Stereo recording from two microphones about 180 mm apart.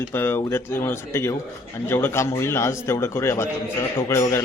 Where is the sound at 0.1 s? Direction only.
15° left (ahead or behind).